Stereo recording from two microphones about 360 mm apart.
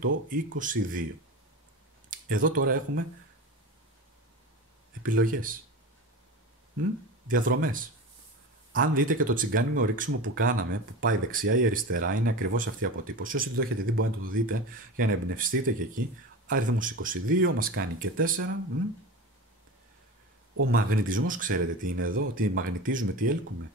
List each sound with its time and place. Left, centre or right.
0.3 s speech: right
2.0 s speech: right
5.0 s speech: right
6.8 s speech: right
20.7 s speech: right
22.0 s speech: right